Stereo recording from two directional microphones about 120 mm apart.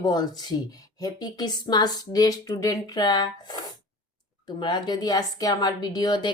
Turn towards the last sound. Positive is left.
turn(degrees=35)  # may be behind; listen again after turning